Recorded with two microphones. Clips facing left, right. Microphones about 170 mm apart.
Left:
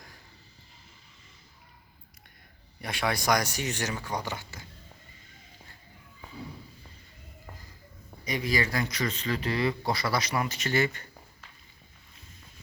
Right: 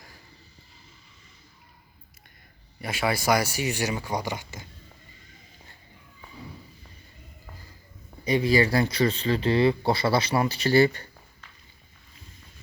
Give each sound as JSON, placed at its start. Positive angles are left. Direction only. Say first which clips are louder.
{"t": 2.8, "sound": "speech", "louder": "right 3 dB", "side_deg": -5}
{"t": 8.2, "sound": "speech", "louder": "right 8 dB", "side_deg": -30}